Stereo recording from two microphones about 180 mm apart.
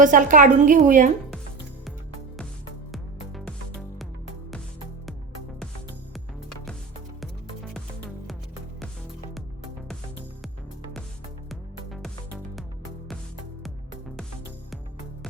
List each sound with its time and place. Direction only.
0.0 s a woman's voice: 45° right (ahead or behind)
2.9 s music: centre (ahead or behind)
11.4 s music: centre (ahead or behind)